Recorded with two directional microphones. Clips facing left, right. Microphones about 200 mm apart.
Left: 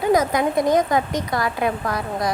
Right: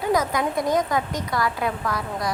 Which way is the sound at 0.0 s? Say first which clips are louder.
Left 4 dB; 20° left (ahead or behind).